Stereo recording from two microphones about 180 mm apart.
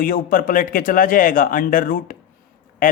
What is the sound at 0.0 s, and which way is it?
A woman's voice, 50° left (ahead or behind).